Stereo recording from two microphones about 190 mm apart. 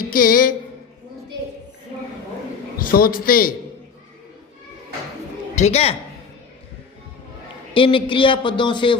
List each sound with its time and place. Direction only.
0.1 s speech: 50° left (ahead or behind)
2.7 s a man's voice: 50° left (ahead or behind)
5.5 s a man's voice: 35° left (ahead or behind)
7.7 s a man's voice: 25° left (ahead or behind)